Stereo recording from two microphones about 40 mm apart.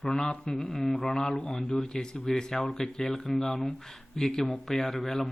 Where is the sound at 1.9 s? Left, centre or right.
Left.